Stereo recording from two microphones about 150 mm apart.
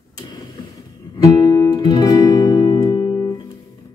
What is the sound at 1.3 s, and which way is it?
Music, 25° left (ahead or behind).